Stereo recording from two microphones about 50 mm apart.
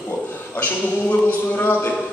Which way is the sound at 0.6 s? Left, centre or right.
Left.